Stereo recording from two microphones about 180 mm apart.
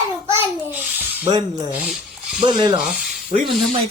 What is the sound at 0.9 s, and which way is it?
Speech, 10° right (ahead or behind).